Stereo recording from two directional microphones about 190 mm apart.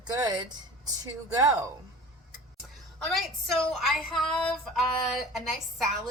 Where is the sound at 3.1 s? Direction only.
Centre (ahead or behind).